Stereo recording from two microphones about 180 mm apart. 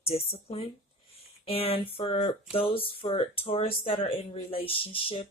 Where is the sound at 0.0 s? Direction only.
35° left (ahead or behind).